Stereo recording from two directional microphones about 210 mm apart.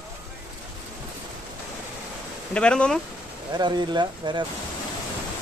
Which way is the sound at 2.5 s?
5° left (ahead or behind).